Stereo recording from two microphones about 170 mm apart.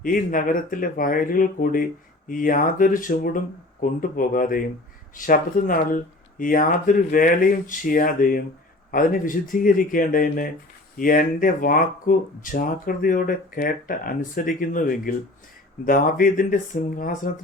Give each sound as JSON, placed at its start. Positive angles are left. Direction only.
{"t": 0.0, "sound": "speech", "side_deg": 50}